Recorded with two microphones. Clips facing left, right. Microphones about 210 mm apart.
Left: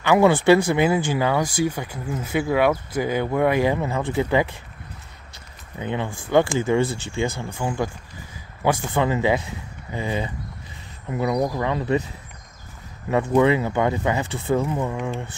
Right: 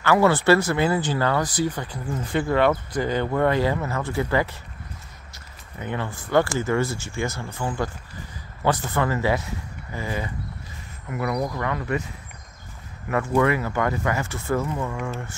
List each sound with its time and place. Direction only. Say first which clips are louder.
0.0 s speech: left 2 dB; 15° left (ahead or behind)
5.8 s speech: left 3 dB; 15° left (ahead or behind)
7.2 s speech: left 4 dB; 25° left (ahead or behind)
7.5 s speech: left 2 dB; 15° left (ahead or behind)
13.1 s speech: left 3 dB; 20° left (ahead or behind)